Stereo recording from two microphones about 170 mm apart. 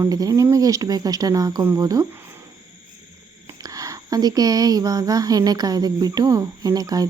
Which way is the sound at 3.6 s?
20° right (ahead or behind).